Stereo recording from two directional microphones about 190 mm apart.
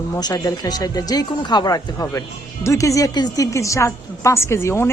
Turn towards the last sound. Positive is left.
turn(degrees=15)  # may be behind; listen again after turning